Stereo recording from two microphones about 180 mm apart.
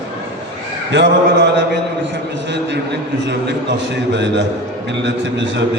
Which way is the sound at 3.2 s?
75° right (ahead or behind).